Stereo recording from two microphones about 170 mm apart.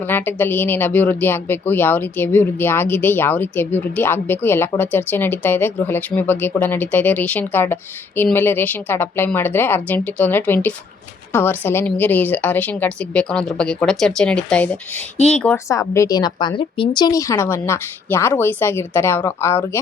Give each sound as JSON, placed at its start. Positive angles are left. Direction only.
{"t": 0.0, "sound": "speech", "side_deg": 10}
{"t": 15.5, "sound": "speech", "side_deg": 15}